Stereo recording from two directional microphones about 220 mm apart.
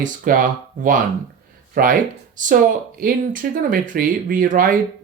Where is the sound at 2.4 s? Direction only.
35° right (ahead or behind).